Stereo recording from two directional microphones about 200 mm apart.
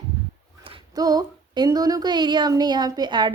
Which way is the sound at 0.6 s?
20° right (ahead or behind).